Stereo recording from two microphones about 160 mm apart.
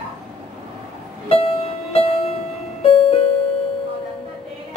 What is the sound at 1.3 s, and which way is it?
Music, 35° left (ahead or behind).